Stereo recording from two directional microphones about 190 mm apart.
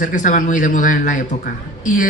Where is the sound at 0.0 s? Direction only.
40° left (ahead or behind).